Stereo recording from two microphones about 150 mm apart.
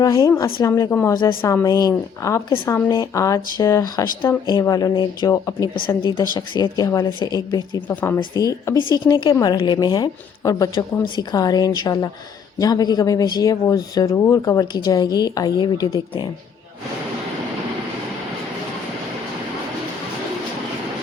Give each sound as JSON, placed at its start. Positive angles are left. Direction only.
{"t": 0.0, "sound": "speech", "side_deg": 20}
{"t": 7.9, "sound": "speech", "side_deg": 15}